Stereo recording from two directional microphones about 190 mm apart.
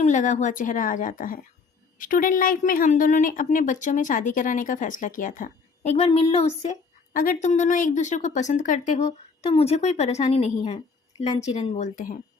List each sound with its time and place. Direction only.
0.0 s a woman's voice: 40° left (ahead or behind)